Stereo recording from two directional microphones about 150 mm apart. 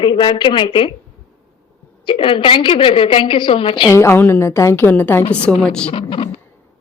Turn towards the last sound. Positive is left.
turn(degrees=35)  # may be behind; listen again after turning